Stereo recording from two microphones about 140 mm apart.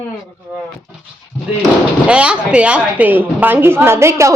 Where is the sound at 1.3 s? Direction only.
15° left (ahead or behind).